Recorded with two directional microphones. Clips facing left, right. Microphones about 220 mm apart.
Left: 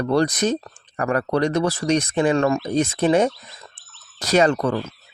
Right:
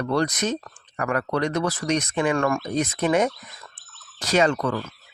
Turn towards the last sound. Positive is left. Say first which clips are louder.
# left 3 dB
turn(degrees=30)  # may be behind; listen again after turning